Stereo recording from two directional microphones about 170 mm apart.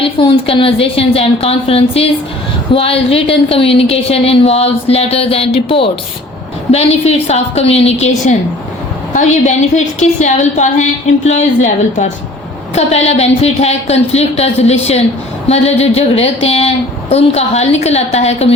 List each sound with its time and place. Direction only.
0.0 s a woman's voice: 30° left (ahead or behind)